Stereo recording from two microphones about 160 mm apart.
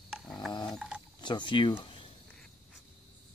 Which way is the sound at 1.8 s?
30° left (ahead or behind).